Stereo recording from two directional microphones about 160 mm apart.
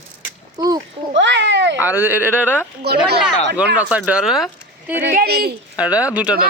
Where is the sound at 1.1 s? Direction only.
90° right.